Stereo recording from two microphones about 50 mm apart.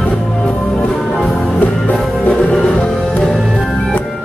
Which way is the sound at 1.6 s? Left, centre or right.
Left.